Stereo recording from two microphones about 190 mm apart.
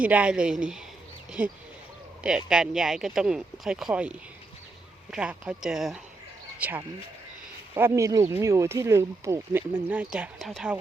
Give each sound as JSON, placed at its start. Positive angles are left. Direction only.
{"t": 0.0, "sound": "speech", "side_deg": -5}